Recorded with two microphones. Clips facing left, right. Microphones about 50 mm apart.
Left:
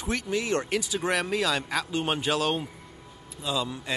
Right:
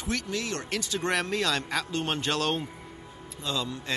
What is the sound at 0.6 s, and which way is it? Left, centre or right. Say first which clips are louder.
A man's voice: left 2 dB; centre.